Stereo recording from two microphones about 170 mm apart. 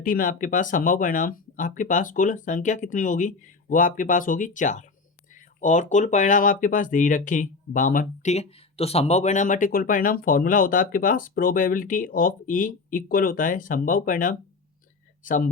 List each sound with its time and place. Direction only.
0.0 s speech: 55° left (ahead or behind)